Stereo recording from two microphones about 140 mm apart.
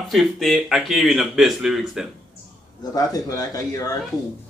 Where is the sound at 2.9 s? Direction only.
25° left (ahead or behind).